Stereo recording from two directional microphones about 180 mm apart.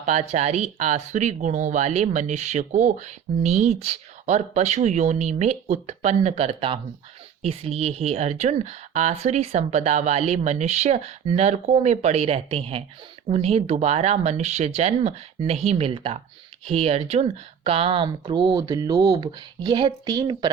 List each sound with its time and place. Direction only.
0.0 s speech: 40° right (ahead or behind); by 20.5 s 20° right (ahead or behind)